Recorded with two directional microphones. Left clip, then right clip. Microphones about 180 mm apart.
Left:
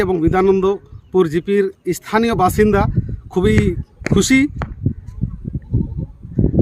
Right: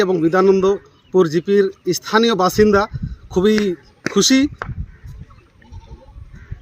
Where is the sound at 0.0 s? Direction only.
30° left (ahead or behind).